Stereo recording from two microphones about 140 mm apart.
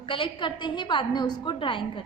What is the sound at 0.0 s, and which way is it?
A woman's voice, 40° left (ahead or behind).